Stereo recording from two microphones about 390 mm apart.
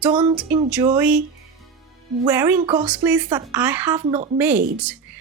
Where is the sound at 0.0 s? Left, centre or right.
Centre.